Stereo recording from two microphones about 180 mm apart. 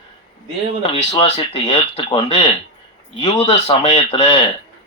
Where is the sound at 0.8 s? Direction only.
35° left (ahead or behind).